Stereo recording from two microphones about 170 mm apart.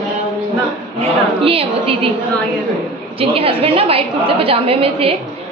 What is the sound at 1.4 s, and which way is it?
Speech, 35° right (ahead or behind).